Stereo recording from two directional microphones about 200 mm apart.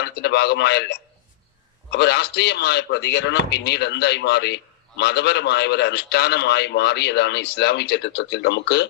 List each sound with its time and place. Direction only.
0.0 s speech: 55° left (ahead or behind)